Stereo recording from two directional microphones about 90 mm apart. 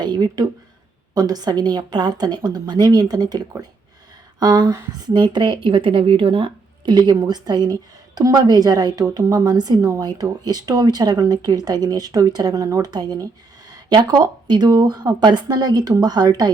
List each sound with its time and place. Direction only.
0.0 s a woman's voice: 50° right (ahead or behind)